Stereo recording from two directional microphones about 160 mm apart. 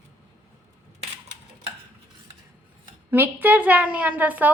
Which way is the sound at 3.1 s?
15° right (ahead or behind).